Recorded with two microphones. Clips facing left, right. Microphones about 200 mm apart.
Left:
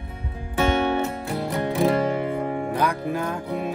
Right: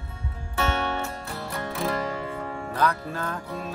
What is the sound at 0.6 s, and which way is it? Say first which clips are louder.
Music: left 6 dB; 20° left (ahead or behind).